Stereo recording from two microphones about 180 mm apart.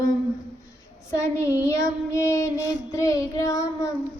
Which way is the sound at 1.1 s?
15° left (ahead or behind).